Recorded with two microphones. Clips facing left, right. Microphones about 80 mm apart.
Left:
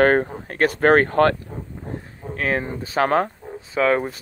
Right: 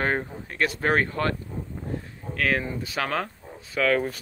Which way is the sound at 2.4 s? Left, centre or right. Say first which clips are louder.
Left 2 dB; left.